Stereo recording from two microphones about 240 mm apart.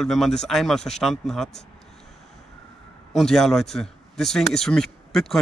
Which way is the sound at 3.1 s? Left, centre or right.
Centre.